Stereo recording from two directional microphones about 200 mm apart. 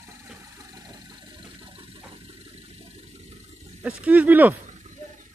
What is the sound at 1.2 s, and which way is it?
Engine, 25° right (ahead or behind).